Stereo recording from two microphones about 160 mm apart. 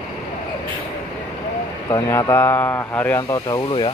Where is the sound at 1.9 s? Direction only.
20° left (ahead or behind).